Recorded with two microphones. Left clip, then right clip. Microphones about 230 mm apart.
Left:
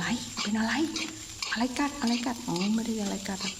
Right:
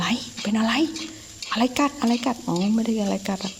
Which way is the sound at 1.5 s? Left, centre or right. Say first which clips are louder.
Right 9 dB; right.